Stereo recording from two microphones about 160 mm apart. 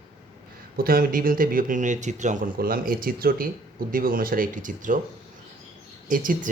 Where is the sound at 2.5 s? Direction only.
65° right (ahead or behind).